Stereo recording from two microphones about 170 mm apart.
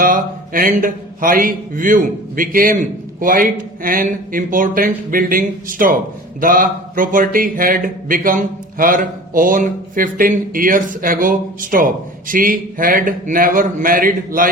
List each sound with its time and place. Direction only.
0.0 s speech: 55° right (ahead or behind)